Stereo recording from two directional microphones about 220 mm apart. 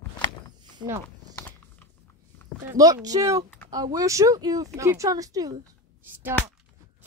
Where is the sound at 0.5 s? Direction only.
20° right (ahead or behind).